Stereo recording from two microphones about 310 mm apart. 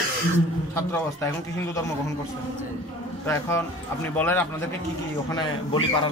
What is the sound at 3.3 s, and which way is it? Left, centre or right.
Speech, centre.